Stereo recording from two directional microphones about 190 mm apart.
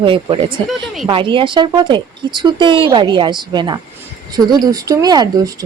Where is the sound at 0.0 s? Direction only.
25° right (ahead or behind).